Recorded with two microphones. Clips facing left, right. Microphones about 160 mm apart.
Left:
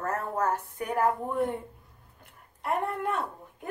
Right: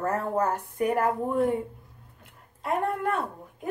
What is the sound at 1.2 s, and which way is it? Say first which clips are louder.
Speech: right 4 dB; 5° right (ahead or behind).